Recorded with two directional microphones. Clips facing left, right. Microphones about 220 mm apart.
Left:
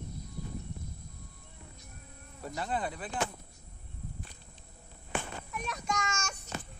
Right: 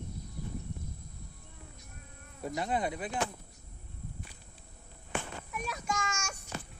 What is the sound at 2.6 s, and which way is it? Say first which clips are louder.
Speech: right 2 dB; 10° right (ahead or behind).